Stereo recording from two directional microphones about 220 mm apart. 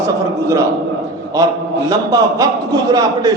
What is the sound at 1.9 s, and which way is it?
A man's voice, 15° right (ahead or behind).